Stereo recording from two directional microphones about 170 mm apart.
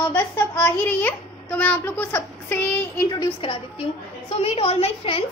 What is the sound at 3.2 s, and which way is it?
A child's voice, 30° left (ahead or behind).